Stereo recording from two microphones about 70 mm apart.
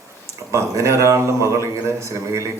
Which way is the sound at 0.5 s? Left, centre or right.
Right.